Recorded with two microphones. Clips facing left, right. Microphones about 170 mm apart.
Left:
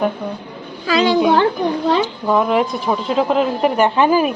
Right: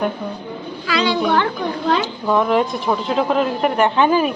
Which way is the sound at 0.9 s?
40° left (ahead or behind).